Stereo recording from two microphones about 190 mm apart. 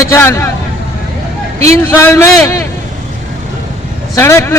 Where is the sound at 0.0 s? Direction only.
15° left (ahead or behind).